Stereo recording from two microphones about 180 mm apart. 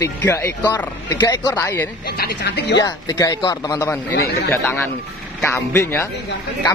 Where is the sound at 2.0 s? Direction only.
60° left (ahead or behind).